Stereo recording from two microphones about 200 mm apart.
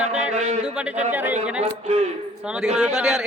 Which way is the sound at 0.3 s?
35° right (ahead or behind).